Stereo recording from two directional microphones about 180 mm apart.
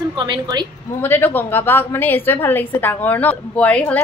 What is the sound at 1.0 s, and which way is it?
A woman's voice, 10° left (ahead or behind).